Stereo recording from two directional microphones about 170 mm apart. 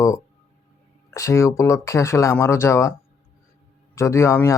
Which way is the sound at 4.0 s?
15° left (ahead or behind).